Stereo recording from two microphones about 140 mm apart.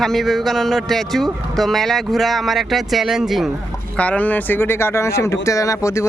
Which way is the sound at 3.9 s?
10° left (ahead or behind).